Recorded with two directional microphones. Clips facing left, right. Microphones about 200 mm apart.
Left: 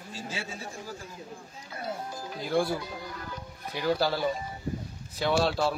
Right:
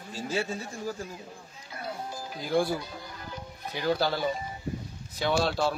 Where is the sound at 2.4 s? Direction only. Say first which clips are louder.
Right 1 dB; centre (ahead or behind).